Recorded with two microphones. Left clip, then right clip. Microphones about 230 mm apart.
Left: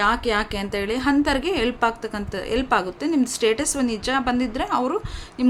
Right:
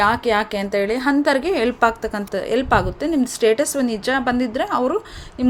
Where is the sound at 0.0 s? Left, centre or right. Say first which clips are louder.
Right 3 dB; centre.